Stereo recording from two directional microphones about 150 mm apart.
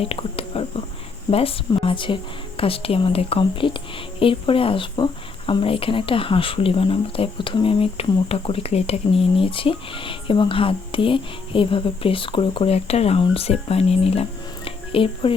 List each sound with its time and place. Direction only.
0.0 s whispering: 40° left (ahead or behind)
1.3 s speech: 40° left (ahead or behind)